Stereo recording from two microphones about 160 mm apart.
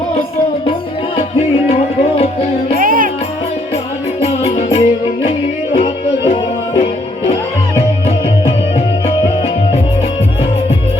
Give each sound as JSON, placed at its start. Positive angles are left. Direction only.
{"t": 2.1, "sound": "music", "side_deg": 40}
{"t": 2.7, "sound": "music", "side_deg": -60}
{"t": 4.2, "sound": "music", "side_deg": 40}